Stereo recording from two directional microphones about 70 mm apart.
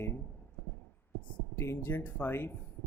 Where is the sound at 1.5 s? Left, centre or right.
Left.